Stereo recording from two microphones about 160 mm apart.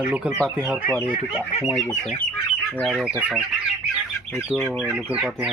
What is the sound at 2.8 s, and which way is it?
Speech, 5° right (ahead or behind).